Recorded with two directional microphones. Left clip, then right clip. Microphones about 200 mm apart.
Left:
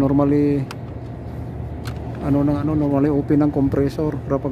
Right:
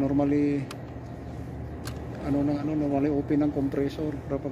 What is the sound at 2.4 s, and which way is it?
Speech, 40° left (ahead or behind).